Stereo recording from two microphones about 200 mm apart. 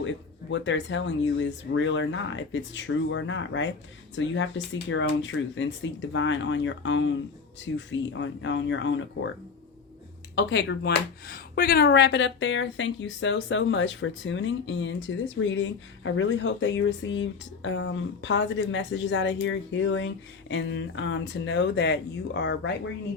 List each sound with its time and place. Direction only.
0.0 s speech: 70° left (ahead or behind)
10.3 s speech: 60° left (ahead or behind)
15.4 s speech: 60° left (ahead or behind)